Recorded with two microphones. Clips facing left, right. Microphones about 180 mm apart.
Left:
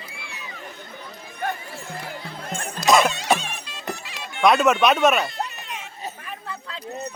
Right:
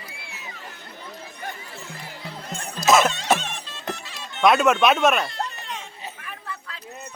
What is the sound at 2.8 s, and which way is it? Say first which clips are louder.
Music: even; centre (ahead or behind).